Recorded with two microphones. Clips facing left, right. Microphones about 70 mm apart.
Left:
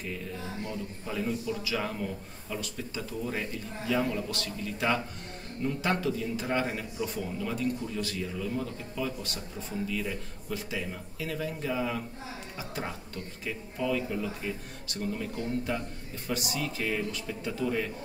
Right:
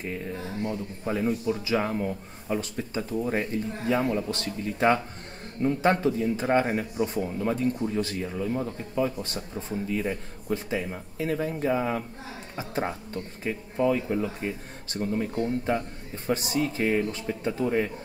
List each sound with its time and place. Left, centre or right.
0.0 s speech: right